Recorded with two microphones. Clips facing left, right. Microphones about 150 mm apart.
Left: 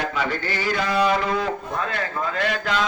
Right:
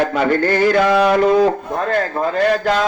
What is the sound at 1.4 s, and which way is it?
A man's voice, 45° right (ahead or behind).